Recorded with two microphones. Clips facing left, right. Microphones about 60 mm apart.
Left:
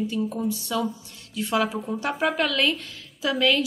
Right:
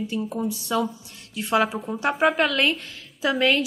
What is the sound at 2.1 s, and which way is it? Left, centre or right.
Speech, right.